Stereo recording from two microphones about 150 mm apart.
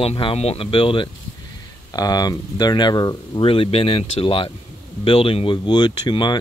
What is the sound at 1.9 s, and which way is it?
Speech, 25° left (ahead or behind).